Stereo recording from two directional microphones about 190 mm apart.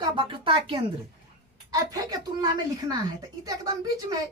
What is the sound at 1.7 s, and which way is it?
A woman's voice, 20° right (ahead or behind).